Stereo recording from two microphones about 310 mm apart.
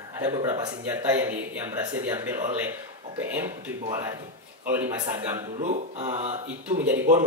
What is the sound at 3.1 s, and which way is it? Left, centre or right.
Speech, centre.